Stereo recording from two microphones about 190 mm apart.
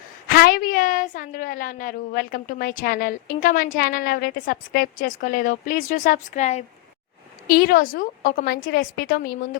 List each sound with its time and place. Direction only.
0.3 s a woman's voice: 50° left (ahead or behind)
7.4 s a woman's voice: 50° left (ahead or behind)